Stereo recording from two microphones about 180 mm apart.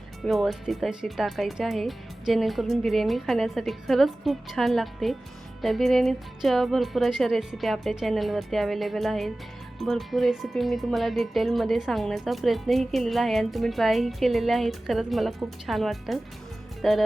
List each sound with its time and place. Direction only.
0.2 s speech: centre (ahead or behind)